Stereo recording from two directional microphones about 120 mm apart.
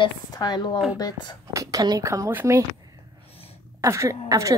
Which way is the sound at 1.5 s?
30° right (ahead or behind).